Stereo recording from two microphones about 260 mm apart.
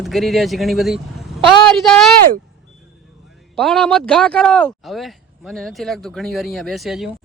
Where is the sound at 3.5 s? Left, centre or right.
Centre.